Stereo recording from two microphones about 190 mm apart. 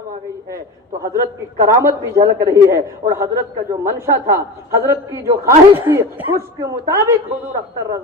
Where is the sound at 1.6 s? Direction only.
15° right (ahead or behind).